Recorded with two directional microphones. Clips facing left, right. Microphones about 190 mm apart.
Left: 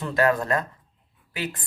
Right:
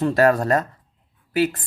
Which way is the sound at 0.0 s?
45° right (ahead or behind).